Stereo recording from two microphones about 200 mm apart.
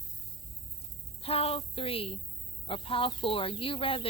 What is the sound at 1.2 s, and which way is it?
Speech, 30° left (ahead or behind).